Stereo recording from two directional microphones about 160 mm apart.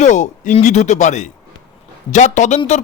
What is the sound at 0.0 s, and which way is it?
Speech, 50° left (ahead or behind).